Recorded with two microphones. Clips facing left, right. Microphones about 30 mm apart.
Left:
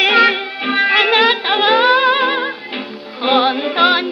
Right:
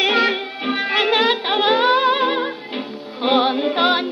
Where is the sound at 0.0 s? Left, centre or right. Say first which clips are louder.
Left 5 dB; left.